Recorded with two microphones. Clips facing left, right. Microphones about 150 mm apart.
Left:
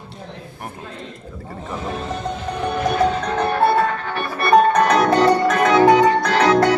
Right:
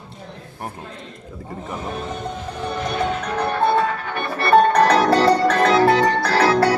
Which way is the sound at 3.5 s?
10° left (ahead or behind).